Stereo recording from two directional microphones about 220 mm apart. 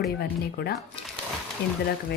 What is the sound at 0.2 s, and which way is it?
A woman's voice, 45° left (ahead or behind).